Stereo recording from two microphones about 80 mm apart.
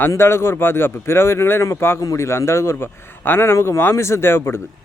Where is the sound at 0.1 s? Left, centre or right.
Left.